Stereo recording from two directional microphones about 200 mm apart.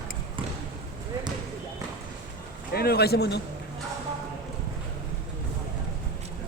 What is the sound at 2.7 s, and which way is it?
Speech, 50° left (ahead or behind).